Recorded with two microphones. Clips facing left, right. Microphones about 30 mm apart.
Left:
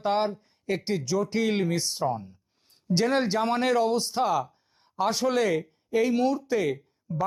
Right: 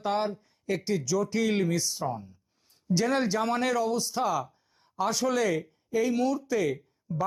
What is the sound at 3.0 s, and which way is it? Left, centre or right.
A man's voice, left.